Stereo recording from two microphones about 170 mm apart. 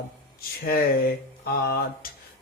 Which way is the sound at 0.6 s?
65° left (ahead or behind).